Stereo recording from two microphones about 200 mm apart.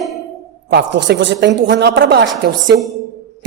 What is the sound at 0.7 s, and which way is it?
A woman's voice, 60° right (ahead or behind).